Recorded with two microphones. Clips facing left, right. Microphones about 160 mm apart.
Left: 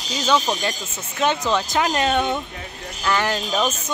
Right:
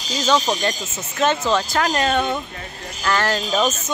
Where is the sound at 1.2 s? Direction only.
15° left (ahead or behind).